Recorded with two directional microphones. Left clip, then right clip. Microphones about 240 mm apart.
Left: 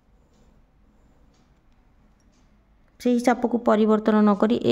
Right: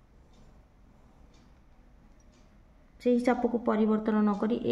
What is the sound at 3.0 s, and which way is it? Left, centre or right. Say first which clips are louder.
A woman's voice: left 5 dB; left.